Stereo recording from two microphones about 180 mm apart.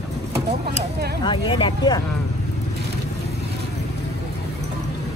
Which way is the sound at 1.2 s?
25° left (ahead or behind).